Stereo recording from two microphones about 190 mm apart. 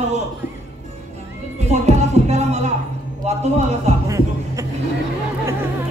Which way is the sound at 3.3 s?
35° right (ahead or behind).